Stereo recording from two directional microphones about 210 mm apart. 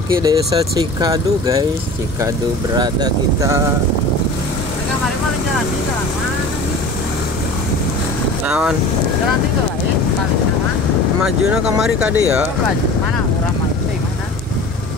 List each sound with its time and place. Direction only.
0.1 s speech: 15° right (ahead or behind)
8.5 s speech: 5° right (ahead or behind)
11.2 s speech: 5° right (ahead or behind)